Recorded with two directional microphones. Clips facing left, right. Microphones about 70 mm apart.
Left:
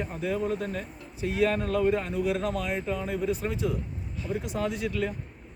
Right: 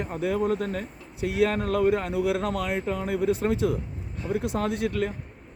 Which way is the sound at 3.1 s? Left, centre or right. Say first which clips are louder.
Right 5 dB; right.